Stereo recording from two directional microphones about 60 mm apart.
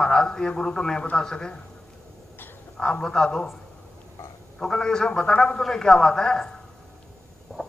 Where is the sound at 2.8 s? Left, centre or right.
Centre.